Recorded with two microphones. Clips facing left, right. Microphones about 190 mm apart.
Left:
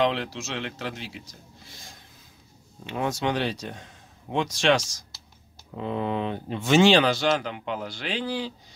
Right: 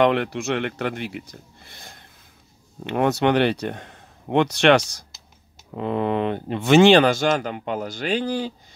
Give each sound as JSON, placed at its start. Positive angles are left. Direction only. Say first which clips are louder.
{"t": 0.0, "sound": "speech", "louder": "right 6 dB", "side_deg": -55}